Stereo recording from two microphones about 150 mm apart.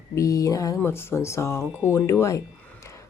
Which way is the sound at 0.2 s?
20° left (ahead or behind).